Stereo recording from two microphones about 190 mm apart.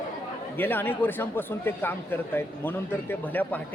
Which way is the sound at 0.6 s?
10° left (ahead or behind).